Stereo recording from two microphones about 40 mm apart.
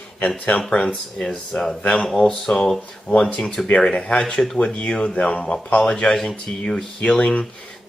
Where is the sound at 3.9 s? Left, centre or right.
Left.